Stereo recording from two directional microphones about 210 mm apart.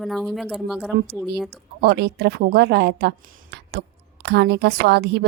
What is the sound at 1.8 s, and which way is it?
A woman's voice, 50° right (ahead or behind).